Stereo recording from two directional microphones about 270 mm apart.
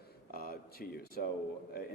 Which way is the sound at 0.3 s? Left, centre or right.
Left.